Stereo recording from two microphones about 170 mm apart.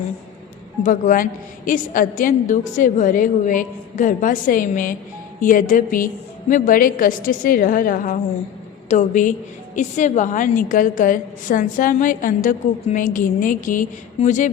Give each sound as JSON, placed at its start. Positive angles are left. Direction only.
{"t": 0.8, "sound": "a woman's voice", "side_deg": 50}